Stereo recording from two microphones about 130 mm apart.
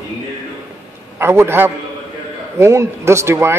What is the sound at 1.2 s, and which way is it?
A man's voice, 20° right (ahead or behind).